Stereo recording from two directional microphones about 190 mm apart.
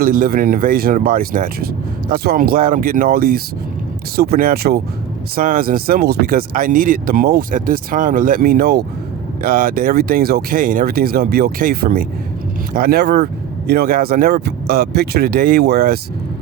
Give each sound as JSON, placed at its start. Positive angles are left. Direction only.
{"t": 0.0, "sound": "speech", "side_deg": -50}